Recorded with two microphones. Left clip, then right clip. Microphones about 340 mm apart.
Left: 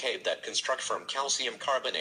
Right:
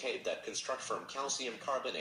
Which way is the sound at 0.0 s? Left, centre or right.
Left.